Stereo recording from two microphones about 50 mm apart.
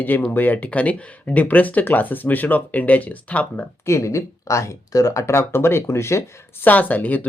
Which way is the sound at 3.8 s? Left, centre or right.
Left.